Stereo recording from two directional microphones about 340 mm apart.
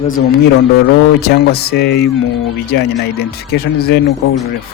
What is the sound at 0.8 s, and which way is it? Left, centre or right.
Speech, left.